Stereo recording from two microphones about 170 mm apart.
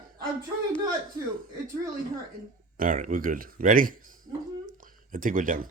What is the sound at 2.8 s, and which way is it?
Speech, 55° right (ahead or behind).